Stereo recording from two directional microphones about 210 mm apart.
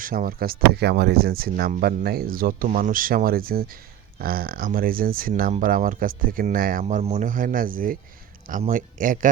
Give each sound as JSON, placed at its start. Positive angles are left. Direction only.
{"t": 0.0, "sound": "speech", "side_deg": -40}